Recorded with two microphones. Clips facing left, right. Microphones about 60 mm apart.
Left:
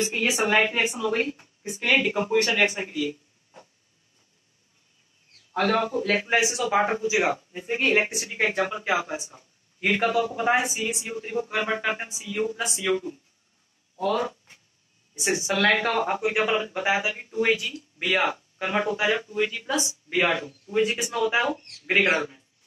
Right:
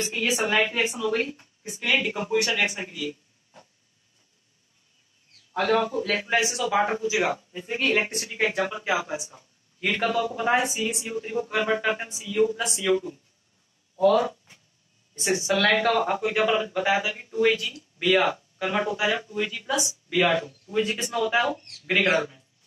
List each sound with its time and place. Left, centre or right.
0.1 s a woman's voice: centre
2.3 s a man's voice: left
3.0 s a sound: centre
5.5 s speech: centre
9.8 s speech: centre
12.5 s a woman's voice: centre